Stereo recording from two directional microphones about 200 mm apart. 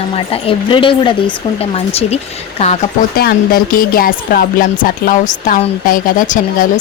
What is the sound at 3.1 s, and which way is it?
Speech, 50° left (ahead or behind).